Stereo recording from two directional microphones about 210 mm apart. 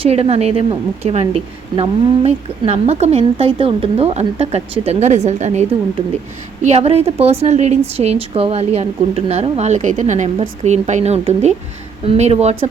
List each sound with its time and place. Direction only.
0.0 s a woman's voice: 30° right (ahead or behind)